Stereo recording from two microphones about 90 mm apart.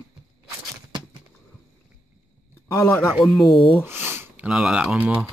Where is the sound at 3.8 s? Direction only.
25° right (ahead or behind).